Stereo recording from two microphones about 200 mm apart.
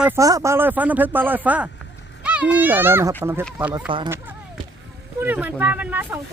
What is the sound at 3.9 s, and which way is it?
Speech, 25° right (ahead or behind).